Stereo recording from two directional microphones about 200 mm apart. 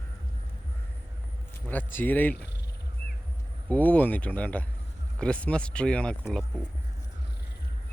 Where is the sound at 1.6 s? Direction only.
10° left (ahead or behind).